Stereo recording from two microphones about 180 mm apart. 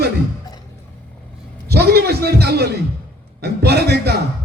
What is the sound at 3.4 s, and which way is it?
Speech, 65° right (ahead or behind).